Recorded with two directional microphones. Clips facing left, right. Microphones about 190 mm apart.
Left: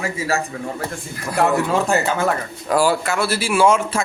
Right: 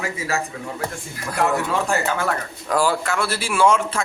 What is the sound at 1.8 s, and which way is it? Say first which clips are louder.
Speech: left 3 dB; 20° left (ahead or behind).